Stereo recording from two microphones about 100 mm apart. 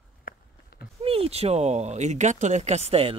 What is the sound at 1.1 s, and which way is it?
Speech, 85° right.